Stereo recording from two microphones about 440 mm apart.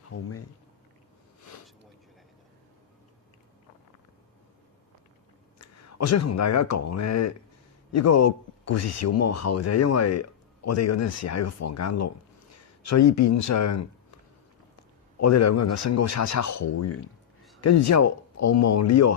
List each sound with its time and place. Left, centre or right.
0.1 s a man's voice: left
5.5 s a man's voice: left
15.2 s a man's voice: left